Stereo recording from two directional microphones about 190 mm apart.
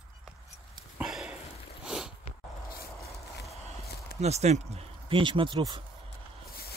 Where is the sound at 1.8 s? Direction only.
5° right (ahead or behind).